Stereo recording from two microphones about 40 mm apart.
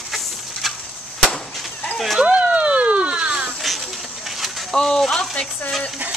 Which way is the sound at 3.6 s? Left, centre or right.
Centre.